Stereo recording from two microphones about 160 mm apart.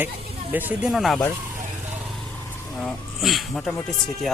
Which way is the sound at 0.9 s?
Centre (ahead or behind).